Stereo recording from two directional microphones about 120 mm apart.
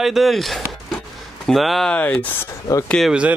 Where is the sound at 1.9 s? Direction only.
10° left (ahead or behind).